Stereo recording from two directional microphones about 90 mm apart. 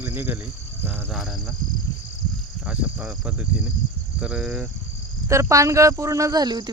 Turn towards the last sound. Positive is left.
turn(degrees=-45)  # may be behind; listen again after turning